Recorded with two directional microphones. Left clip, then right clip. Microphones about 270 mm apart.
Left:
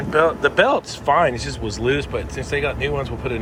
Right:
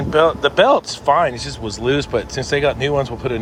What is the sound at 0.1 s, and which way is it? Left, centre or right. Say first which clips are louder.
Speech: right 2 dB; centre.